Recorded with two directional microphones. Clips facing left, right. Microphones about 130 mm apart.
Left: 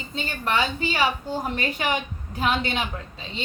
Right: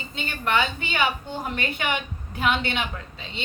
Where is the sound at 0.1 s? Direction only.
35° left (ahead or behind).